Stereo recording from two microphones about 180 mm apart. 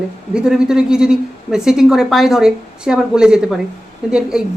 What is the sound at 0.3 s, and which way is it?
A woman's voice, 5° right (ahead or behind).